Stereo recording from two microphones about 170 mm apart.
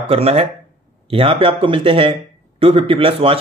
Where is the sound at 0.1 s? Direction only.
35° right (ahead or behind).